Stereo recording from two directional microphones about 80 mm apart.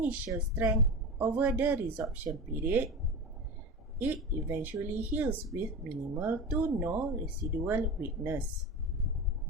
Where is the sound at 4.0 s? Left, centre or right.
Right.